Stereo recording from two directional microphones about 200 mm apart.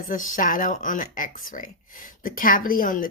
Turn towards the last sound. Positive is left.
turn(degrees=45)  # may be behind; listen again after turning